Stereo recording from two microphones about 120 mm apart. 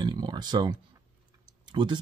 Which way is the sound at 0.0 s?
35° right (ahead or behind).